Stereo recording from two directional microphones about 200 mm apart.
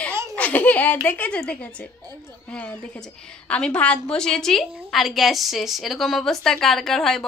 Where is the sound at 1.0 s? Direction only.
10° left (ahead or behind).